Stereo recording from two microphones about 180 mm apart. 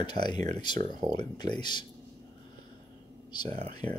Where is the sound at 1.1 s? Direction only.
25° left (ahead or behind).